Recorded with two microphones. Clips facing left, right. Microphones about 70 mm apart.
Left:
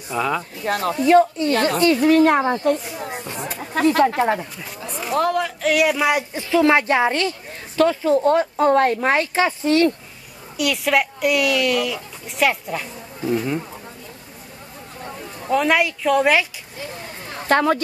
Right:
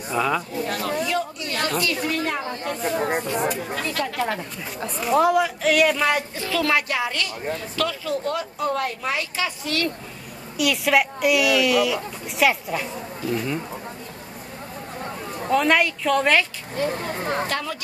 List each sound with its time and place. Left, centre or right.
0.1 s speech: centre
0.7 s a woman's voice: left
2.0 s speech: left
2.7 s speech: right
3.7 s a woman's voice: left
4.8 s speech: centre
6.3 s a woman's voice: left
10.6 s speech: centre
15.5 s speech: centre
16.7 s a sound: right
17.5 s a woman's voice: left